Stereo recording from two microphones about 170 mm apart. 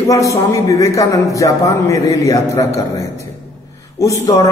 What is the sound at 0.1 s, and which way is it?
A man's voice, 20° left (ahead or behind).